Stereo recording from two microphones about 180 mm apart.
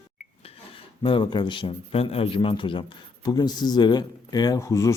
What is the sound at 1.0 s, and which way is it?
A man's voice, 25° left (ahead or behind).